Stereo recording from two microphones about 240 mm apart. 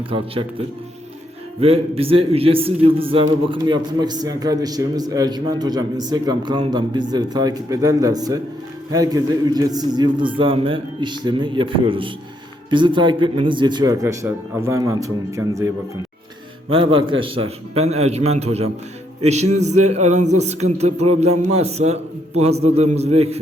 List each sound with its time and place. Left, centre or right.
0.1 s a man's voice: right
1.6 s a man's voice: right